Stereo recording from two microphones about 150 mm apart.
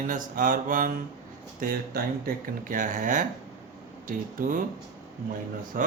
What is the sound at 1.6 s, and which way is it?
Speech, 80° right.